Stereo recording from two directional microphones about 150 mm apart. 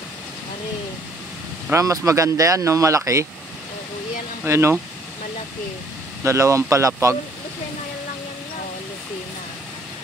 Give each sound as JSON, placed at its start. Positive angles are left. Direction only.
{"t": 1.7, "sound": "speech", "side_deg": -20}
{"t": 4.5, "sound": "speech", "side_deg": -15}
{"t": 6.2, "sound": "speech", "side_deg": -20}